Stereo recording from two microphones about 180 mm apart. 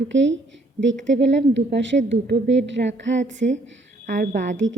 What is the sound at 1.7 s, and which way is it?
A woman's voice, 85° right.